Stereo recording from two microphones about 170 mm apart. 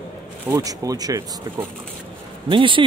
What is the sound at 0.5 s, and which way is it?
Speech, 20° right (ahead or behind).